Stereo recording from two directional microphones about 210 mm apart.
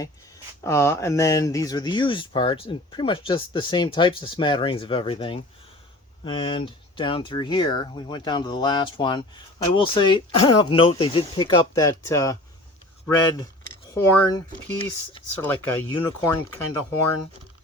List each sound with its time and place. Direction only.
0.6 s speech: 15° left (ahead or behind)
15.4 s speech: 10° left (ahead or behind)